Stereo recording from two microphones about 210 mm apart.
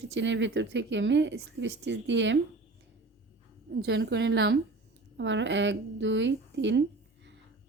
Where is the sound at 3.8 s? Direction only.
55° right (ahead or behind).